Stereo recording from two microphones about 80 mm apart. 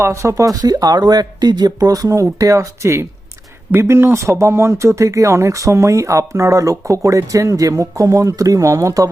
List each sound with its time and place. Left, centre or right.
0.0 s speech: right